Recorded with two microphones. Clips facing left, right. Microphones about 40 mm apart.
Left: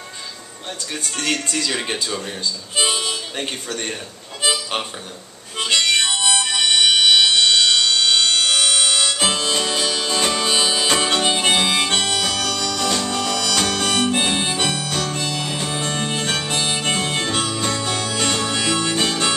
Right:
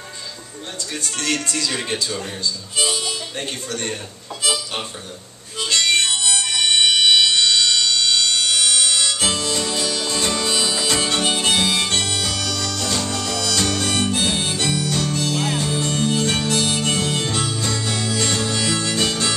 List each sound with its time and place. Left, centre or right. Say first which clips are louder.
1.0 s speech: even; left
1.7 s speech: left 1 dB; centre
2.7 s speech: left 3 dB; left
3.3 s speech: left 1 dB; left
4.4 s music: left 2 dB; left
5.6 s harmonica: left 1 dB; left
6.9 s music: left 2 dB; left
13.9 s harmonica: left 2 dB; left